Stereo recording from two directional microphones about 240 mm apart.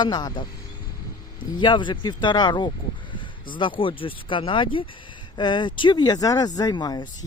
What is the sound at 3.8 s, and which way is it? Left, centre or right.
Speech, left.